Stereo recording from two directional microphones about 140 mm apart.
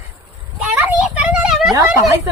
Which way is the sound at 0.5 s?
10° right (ahead or behind).